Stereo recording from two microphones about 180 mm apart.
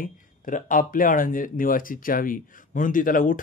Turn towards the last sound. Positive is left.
turn(degrees=50)  # may be behind; listen again after turning